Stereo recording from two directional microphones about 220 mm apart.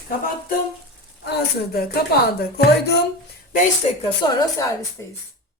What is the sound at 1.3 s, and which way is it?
Speech, 45° left (ahead or behind).